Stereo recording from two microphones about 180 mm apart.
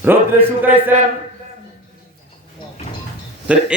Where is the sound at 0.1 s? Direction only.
10° right (ahead or behind).